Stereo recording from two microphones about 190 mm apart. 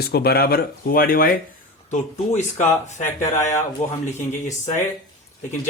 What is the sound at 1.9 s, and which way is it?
Speech, 40° left (ahead or behind).